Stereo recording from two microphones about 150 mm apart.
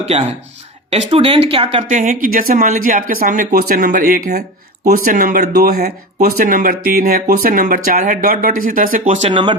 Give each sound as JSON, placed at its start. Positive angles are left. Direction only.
{"t": 0.0, "sound": "speech", "side_deg": -45}
{"t": 1.9, "sound": "speech", "side_deg": -60}
{"t": 2.6, "sound": "speech", "side_deg": -60}
{"t": 4.9, "sound": "speech", "side_deg": -65}
{"t": 6.2, "sound": "speech", "side_deg": -70}
{"t": 9.0, "sound": "speech", "side_deg": -50}
{"t": 9.3, "sound": "speech", "side_deg": -30}